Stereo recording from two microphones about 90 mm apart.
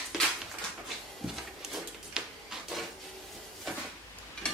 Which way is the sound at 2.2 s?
10° right (ahead or behind).